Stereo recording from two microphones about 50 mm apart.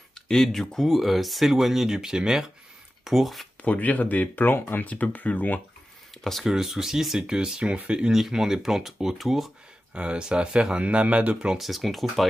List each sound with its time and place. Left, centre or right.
0.1 s speech: centre
3.6 s speech: left
4.5 s speech: left
4.8 s speech: left
6.4 s speech: centre
8.1 s speech: centre
9.9 s speech: right
11.5 s speech: centre